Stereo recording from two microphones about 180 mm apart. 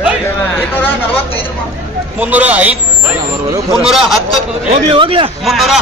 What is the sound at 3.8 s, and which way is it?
Speech, centre (ahead or behind).